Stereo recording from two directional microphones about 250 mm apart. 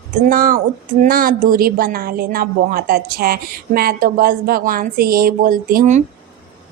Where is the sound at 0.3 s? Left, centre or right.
Right.